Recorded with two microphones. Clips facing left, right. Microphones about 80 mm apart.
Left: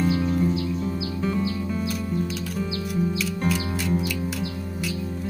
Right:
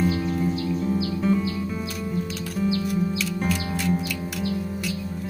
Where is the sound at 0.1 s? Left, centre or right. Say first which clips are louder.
Left 2 dB; centre.